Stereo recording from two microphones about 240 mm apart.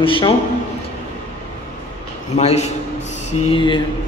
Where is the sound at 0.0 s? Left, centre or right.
Left.